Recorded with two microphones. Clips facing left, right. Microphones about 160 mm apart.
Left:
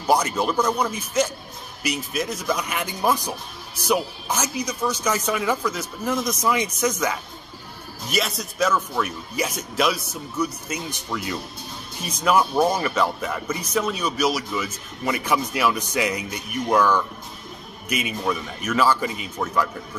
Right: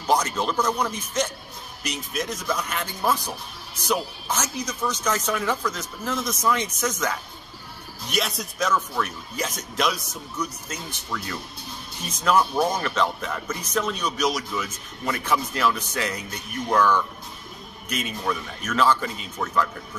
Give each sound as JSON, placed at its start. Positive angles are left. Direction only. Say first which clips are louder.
{"t": 0.0, "sound": "speech", "louder": "left 2 dB", "side_deg": 10}